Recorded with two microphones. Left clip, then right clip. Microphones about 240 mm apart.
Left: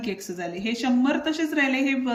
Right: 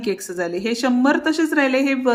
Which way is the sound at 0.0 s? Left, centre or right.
Centre.